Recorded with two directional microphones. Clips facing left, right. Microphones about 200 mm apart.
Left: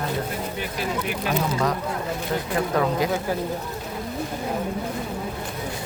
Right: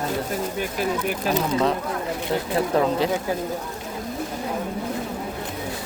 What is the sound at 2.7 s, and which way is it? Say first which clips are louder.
Speech: right 2 dB; 30° right (ahead or behind).